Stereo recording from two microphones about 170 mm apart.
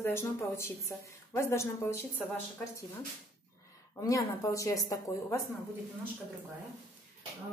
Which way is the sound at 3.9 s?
15° left (ahead or behind).